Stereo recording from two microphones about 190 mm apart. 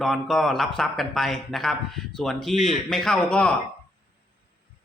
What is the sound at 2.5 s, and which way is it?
Speech, 40° left (ahead or behind).